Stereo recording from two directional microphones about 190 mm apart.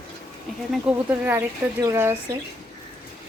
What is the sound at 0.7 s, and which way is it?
A woman's voice, 10° right (ahead or behind).